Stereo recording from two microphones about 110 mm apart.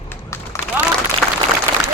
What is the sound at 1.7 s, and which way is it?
Applause, 60° right (ahead or behind).